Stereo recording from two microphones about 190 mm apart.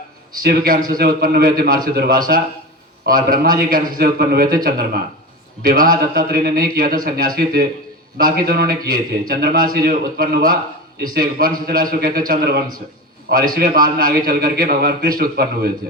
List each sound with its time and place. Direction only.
0.4 s a man's voice: 50° right (ahead or behind)
13.2 s a man's voice: 50° right (ahead or behind)